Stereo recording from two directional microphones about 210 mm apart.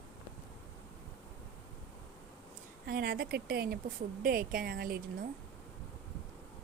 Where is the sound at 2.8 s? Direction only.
45° right (ahead or behind).